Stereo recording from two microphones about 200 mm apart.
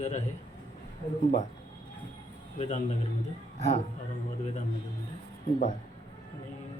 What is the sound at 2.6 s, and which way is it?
Speech, 35° left (ahead or behind).